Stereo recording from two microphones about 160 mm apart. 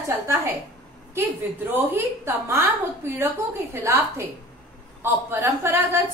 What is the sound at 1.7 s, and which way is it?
Speech, 15° right (ahead or behind).